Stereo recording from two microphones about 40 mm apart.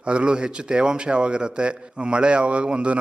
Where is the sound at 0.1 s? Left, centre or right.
Right.